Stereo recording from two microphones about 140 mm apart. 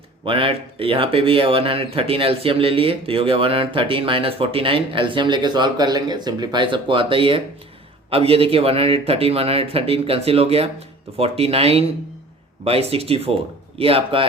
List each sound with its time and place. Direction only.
0.3 s speech: 40° right (ahead or behind)